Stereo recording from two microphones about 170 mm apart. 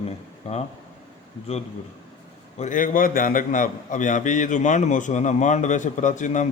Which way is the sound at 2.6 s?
50° left (ahead or behind).